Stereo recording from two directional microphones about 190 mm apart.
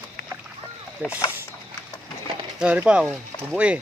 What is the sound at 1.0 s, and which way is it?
Speech, 10° right (ahead or behind).